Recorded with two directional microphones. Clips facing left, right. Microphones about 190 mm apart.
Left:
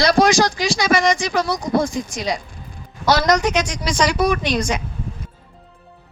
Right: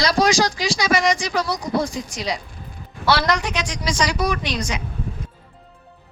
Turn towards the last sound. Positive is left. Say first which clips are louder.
# left 5 dB
turn(degrees=50)  # may be behind; listen again after turning